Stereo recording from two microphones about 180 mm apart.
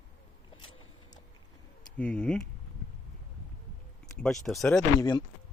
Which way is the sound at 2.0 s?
5° left (ahead or behind).